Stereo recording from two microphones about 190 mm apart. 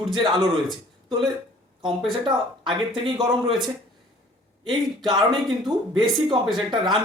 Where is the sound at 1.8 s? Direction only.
25° right (ahead or behind).